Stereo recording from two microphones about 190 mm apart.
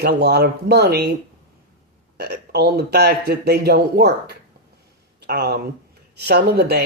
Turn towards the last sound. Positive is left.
turn(degrees=-60)  # may be behind; listen again after turning